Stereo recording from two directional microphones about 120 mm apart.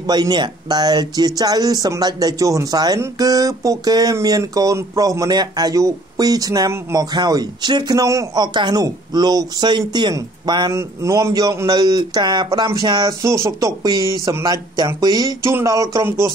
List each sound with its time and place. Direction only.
0.0 s speech: 35° right (ahead or behind)
10.7 s speech: 25° right (ahead or behind)